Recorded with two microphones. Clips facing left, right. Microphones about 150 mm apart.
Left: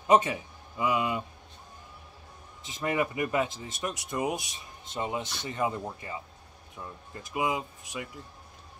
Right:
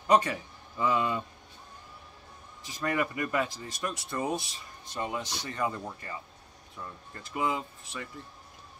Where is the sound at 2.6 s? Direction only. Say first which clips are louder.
Left 1 dB; 20° left (ahead or behind).